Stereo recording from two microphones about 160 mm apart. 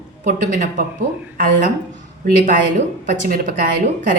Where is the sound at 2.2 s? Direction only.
60° right (ahead or behind).